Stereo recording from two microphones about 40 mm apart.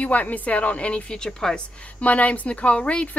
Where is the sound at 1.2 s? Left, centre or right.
Centre.